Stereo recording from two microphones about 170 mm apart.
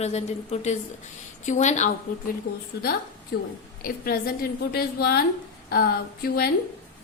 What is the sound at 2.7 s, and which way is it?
A woman's voice, 70° left (ahead or behind).